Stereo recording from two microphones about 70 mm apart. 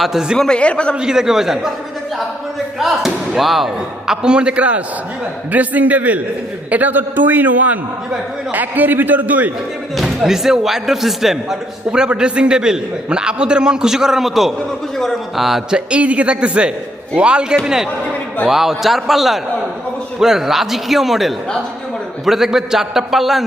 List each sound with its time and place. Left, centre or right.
0.0 s speech: centre
0.3 s a man's voice: centre
0.9 s speech: centre
2.7 s a man's voice: centre; by 9.5 s right
9.9 s a man's voice: centre
15.9 s a man's voice: centre